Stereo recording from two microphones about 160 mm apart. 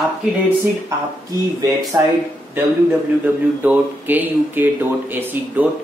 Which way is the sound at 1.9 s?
15° right (ahead or behind).